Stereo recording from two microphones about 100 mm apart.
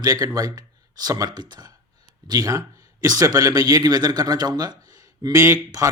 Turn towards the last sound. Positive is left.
turn(degrees=-35)  # may be behind; listen again after turning